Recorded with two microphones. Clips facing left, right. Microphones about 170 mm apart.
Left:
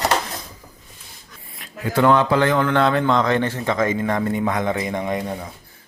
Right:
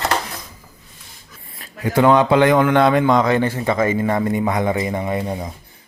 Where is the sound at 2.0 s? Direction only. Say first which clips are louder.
Right 3 dB; 15° right (ahead or behind).